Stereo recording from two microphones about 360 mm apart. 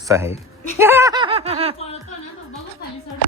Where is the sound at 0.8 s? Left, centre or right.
Centre.